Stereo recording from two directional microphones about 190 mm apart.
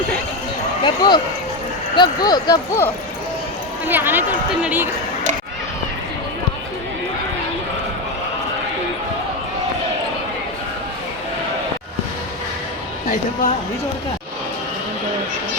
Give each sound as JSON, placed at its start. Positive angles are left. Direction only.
{"t": 0.9, "sound": "speech", "side_deg": 25}
{"t": 3.8, "sound": "speech", "side_deg": -10}